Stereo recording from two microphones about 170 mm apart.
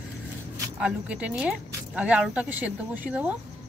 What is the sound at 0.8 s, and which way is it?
Speech, 5° right (ahead or behind).